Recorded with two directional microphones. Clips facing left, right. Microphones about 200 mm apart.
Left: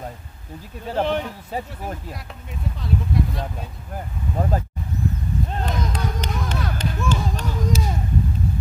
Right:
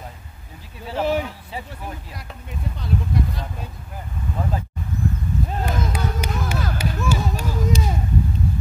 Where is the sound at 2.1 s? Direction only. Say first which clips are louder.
Right 1 dB; centre (ahead or behind).